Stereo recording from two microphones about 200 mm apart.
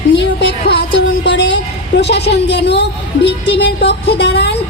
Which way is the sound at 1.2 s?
60° left (ahead or behind).